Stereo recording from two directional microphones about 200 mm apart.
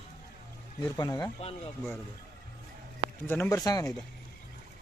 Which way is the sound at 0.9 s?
20° left (ahead or behind).